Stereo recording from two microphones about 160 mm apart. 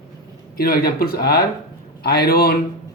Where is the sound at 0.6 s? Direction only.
70° left (ahead or behind).